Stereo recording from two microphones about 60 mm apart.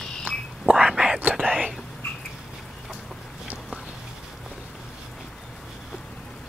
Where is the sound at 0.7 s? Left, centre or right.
Centre.